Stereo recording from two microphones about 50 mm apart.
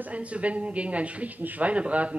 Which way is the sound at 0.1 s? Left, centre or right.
Right.